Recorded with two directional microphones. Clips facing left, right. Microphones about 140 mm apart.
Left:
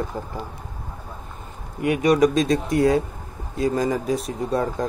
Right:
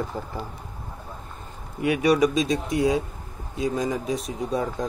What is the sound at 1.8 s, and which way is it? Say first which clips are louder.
Speech: left 2 dB; 45° left (ahead or behind).